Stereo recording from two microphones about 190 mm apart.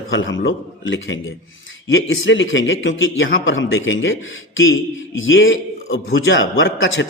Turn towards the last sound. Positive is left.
turn(degrees=85)